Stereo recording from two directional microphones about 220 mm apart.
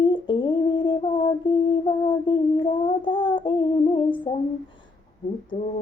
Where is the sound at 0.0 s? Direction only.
20° left (ahead or behind).